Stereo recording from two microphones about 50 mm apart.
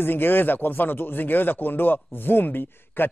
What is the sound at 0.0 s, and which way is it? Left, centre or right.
Speech, left.